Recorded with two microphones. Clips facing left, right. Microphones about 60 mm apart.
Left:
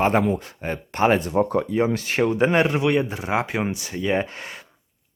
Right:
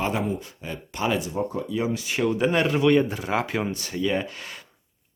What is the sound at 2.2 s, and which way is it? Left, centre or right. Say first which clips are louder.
Speech: left 3 dB; left.